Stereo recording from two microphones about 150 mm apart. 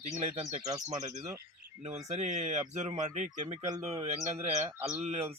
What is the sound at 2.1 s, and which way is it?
Speech, 50° right (ahead or behind).